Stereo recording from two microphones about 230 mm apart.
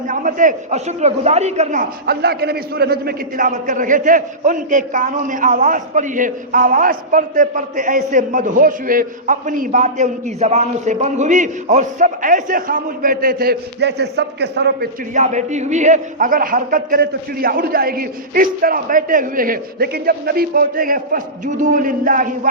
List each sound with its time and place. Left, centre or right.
0.1 s a man's voice: right
15.1 s a man's voice: right